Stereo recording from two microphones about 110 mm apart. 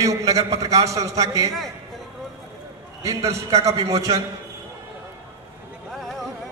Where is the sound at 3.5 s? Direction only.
75° right (ahead or behind).